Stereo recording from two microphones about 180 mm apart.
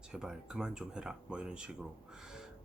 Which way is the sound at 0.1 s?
5° right (ahead or behind).